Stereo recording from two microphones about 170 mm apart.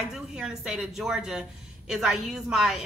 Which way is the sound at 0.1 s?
5° right (ahead or behind).